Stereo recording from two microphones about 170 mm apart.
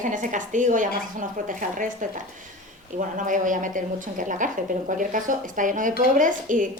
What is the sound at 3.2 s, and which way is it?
A woman's voice, 50° right (ahead or behind).